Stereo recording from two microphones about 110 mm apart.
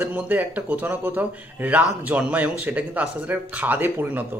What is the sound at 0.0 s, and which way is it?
Speech, 15° right (ahead or behind).